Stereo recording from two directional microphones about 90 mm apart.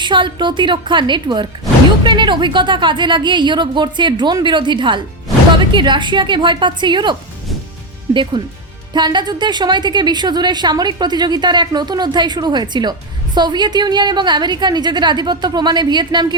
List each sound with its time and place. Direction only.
0.0 s a woman's voice: 60° right (ahead or behind)